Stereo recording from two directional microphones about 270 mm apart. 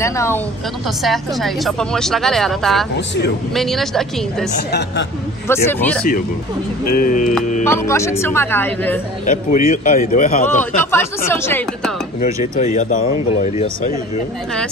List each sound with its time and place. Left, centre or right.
0.0 s speech: centre
4.6 s speech: left
5.5 s speech: centre
7.0 s speech: left
7.6 s speech: centre
9.2 s speech: left
10.9 s speech: centre
12.5 s speech: left